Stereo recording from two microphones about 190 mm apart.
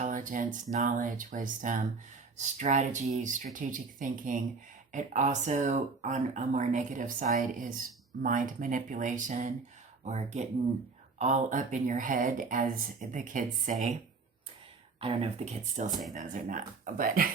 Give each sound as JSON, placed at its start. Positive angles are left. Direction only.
{"t": 0.0, "sound": "speech", "side_deg": -45}
{"t": 15.0, "sound": "speech", "side_deg": -35}